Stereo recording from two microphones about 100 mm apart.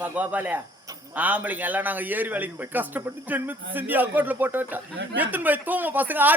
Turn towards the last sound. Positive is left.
turn(degrees=-20)  # may be behind; listen again after turning